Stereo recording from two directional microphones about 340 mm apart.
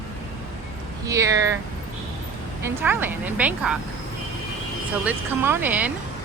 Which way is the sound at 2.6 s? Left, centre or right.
Centre.